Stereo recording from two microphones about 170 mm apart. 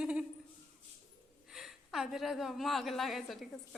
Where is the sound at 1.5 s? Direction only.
Centre (ahead or behind).